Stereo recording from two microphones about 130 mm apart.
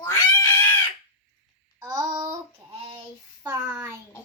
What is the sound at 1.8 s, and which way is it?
Child singing, 25° right (ahead or behind).